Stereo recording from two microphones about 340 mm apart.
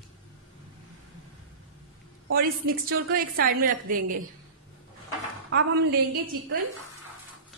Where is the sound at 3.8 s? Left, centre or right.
Right.